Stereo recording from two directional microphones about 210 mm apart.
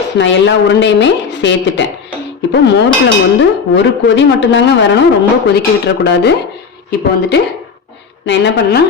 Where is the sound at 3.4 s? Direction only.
60° left (ahead or behind).